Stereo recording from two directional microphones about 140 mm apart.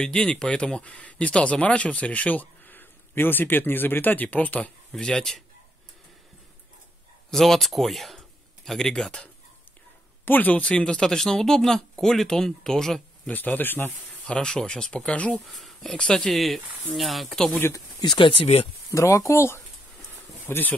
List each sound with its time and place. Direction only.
0.0 s speech: 5° left (ahead or behind)
7.2 s speech: centre (ahead or behind)
17.6 s speech: 15° left (ahead or behind)
18.0 s speech: 35° left (ahead or behind)
18.9 s speech: 25° left (ahead or behind)